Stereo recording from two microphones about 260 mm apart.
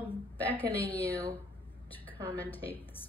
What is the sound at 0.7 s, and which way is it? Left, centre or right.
Speech, left.